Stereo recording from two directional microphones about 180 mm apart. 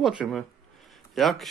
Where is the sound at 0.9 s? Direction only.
Centre (ahead or behind).